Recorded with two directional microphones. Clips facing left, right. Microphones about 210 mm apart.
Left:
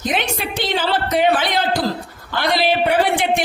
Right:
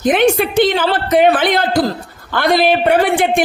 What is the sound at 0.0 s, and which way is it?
A man's voice, 55° right (ahead or behind).